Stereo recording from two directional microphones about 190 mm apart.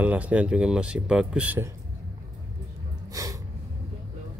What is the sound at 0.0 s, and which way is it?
Speech, 10° right (ahead or behind).